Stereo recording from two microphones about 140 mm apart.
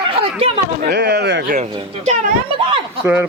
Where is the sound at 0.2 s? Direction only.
40° right (ahead or behind).